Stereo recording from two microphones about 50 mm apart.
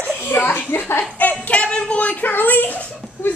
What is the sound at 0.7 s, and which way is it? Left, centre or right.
Speech, left.